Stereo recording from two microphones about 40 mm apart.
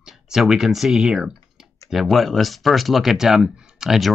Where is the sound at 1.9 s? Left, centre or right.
Centre.